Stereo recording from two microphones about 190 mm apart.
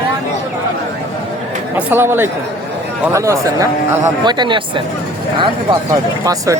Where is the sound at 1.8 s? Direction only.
10° right (ahead or behind); by 5.8 s 25° right (ahead or behind).